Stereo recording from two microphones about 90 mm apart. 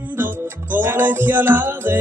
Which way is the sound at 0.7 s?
20° right (ahead or behind).